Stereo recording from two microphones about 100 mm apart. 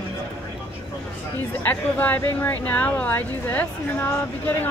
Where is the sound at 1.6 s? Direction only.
20° left (ahead or behind).